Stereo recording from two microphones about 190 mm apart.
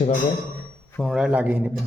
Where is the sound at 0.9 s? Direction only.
Centre (ahead or behind).